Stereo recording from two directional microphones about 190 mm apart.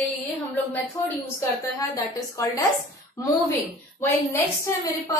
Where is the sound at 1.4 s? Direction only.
20° left (ahead or behind).